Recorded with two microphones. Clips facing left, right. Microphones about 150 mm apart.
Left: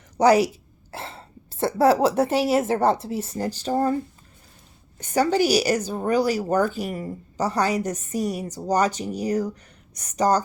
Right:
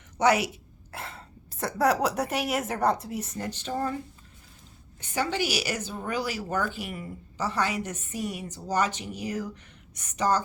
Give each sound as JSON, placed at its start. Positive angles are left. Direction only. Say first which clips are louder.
{"t": 0.2, "sound": "speech", "louder": "left 6 dB", "side_deg": 35}
{"t": 4.9, "sound": "a woman's voice", "louder": "left 8 dB", "side_deg": 40}